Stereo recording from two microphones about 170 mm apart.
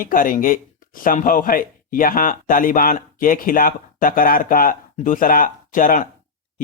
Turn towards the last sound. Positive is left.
turn(degrees=50)  # may be behind; listen again after turning